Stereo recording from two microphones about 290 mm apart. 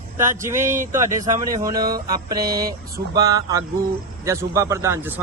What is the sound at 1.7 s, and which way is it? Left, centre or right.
Speech, right.